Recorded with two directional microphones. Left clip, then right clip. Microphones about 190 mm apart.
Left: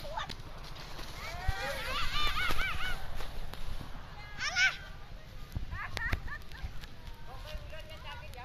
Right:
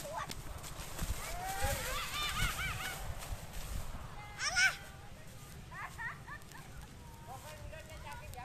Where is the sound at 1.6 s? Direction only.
80° right.